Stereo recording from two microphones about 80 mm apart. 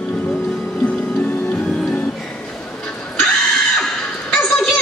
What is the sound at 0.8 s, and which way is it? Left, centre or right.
Music, left.